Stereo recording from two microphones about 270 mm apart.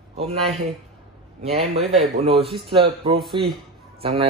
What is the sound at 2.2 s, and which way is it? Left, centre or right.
Speech, right.